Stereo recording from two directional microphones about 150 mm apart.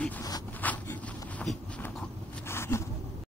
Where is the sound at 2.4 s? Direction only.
15° left (ahead or behind).